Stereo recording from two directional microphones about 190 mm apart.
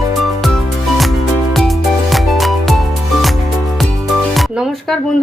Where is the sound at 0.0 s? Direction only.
Centre (ahead or behind).